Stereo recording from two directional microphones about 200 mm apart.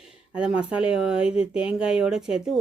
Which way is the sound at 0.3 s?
5° right (ahead or behind).